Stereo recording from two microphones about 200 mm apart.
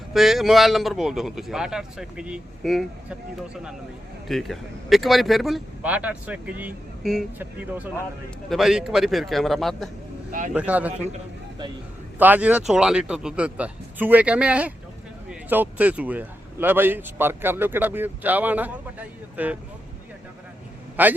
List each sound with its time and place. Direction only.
0.1 s speech: centre (ahead or behind)
10.9 s a man's voice: 35° right (ahead or behind)
12.2 s speech: 10° right (ahead or behind)
20.9 s a man's voice: 10° right (ahead or behind)